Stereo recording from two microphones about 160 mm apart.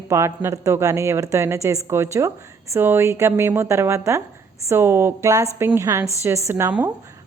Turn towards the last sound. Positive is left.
turn(degrees=-10)  # may be behind; listen again after turning